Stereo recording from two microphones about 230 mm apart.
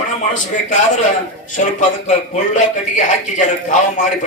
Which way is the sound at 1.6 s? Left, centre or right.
Left.